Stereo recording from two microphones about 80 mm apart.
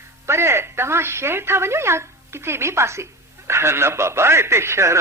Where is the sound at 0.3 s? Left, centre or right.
Right.